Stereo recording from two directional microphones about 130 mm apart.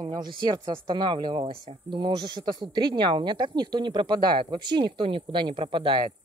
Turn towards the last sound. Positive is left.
turn(degrees=-40)  # may be behind; listen again after turning